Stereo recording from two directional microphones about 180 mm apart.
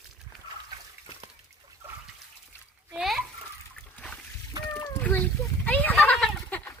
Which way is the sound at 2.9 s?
Centre (ahead or behind).